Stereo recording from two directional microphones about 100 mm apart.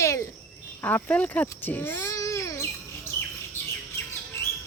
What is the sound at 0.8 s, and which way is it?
Baby cry, 20° left (ahead or behind).